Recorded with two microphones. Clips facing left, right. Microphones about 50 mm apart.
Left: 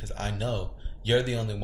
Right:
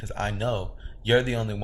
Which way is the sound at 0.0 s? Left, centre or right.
Right.